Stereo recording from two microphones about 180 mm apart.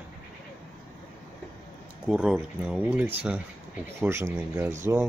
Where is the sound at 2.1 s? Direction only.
5° right (ahead or behind).